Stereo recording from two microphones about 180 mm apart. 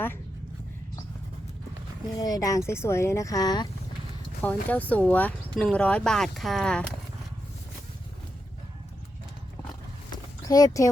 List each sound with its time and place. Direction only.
2.1 s speech: 20° left (ahead or behind)
4.4 s speech: 10° left (ahead or behind)
10.5 s speech: 20° left (ahead or behind)